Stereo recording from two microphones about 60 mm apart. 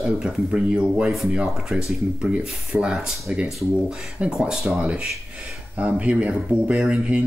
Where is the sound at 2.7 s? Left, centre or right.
Centre.